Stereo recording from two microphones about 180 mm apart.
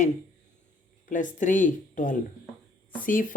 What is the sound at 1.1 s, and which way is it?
Speech, 45° left (ahead or behind).